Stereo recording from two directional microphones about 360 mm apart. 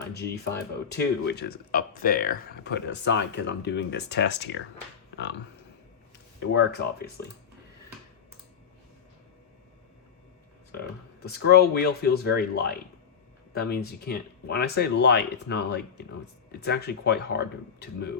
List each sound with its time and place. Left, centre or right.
0.1 s speech: left
5.1 s a sound: left
6.4 s speech: left
10.7 s speech: left